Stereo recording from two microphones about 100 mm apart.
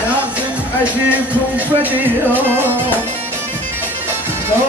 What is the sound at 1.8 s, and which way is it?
Music, 15° right (ahead or behind).